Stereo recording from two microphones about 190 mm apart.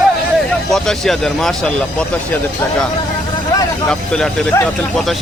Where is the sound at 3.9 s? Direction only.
5° left (ahead or behind).